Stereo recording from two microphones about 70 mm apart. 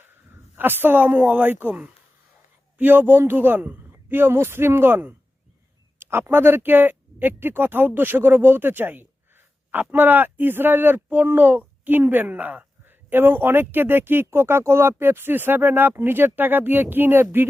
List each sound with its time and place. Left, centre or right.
0.0 s speech: right